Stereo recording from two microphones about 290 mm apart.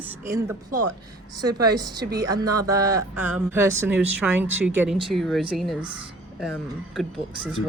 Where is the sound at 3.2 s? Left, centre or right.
Centre.